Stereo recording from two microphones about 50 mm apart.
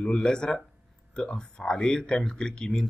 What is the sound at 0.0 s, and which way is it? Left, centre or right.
Speech, centre.